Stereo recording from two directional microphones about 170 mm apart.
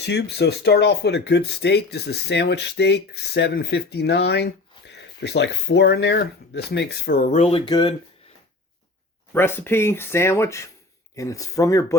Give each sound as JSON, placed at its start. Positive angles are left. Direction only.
{"t": 0.0, "sound": "speech", "side_deg": 80}
{"t": 7.3, "sound": "speech", "side_deg": 40}
{"t": 7.6, "sound": "speech", "side_deg": 25}
{"t": 9.3, "sound": "speech", "side_deg": 15}